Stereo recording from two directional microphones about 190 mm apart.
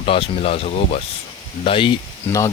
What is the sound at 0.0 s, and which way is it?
Speech, 30° left (ahead or behind).